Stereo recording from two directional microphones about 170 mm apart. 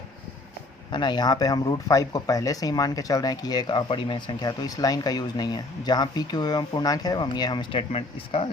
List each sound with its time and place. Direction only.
0.9 s speech: 25° left (ahead or behind)